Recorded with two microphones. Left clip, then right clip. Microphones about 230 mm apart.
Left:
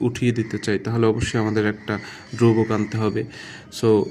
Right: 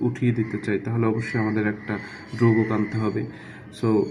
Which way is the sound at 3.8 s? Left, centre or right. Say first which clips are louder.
Left 5 dB; left.